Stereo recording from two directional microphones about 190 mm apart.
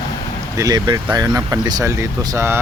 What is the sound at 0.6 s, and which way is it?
Speech, 20° right (ahead or behind).